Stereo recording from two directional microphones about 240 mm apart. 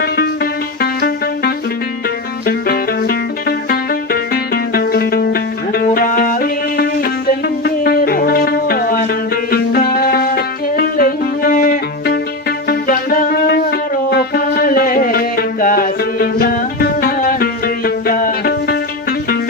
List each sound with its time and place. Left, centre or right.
0.8 s music: left